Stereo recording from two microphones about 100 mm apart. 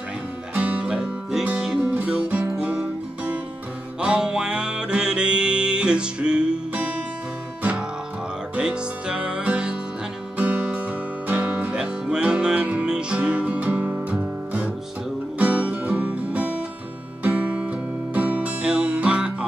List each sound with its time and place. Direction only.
0.6 s music: 10° right (ahead or behind)
8.5 s music: 10° right (ahead or behind)